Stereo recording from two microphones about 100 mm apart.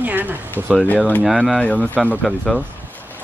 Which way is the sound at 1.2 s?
Centre (ahead or behind).